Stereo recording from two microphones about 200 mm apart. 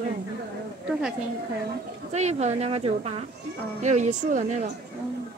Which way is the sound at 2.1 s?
35° right (ahead or behind).